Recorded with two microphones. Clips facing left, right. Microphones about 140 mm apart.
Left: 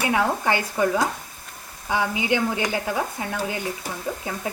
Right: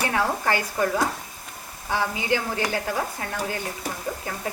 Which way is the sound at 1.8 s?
15° left (ahead or behind).